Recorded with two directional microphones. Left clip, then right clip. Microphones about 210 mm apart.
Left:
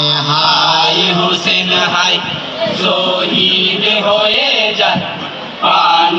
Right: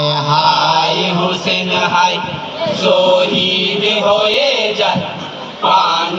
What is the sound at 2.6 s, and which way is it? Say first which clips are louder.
Chant: right 2 dB; 60° right (ahead or behind).